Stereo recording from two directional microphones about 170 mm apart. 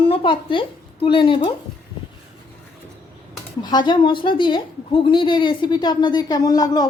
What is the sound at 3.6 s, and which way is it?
A woman's voice, 25° left (ahead or behind).